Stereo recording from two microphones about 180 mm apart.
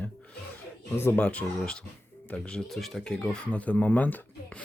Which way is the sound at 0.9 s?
10° left (ahead or behind).